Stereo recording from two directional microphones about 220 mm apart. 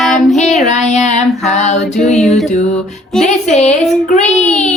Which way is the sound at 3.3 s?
30° left (ahead or behind).